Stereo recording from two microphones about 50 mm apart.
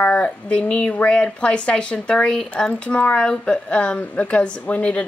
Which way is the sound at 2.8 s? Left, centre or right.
Left.